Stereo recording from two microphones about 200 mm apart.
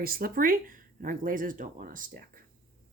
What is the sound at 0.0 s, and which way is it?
A woman's voice, 50° right (ahead or behind).